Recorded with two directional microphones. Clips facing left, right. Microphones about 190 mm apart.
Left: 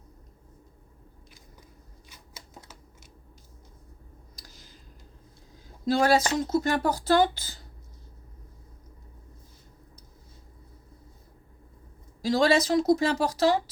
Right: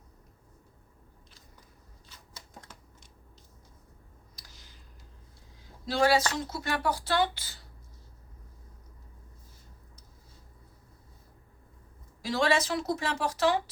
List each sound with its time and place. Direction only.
2.0 s shuffling cards: 10° left (ahead or behind)
5.8 s speech: 45° left (ahead or behind)
12.2 s a woman's voice: 40° left (ahead or behind)